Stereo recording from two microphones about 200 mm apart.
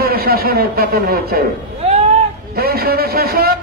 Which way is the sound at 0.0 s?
50° right (ahead or behind).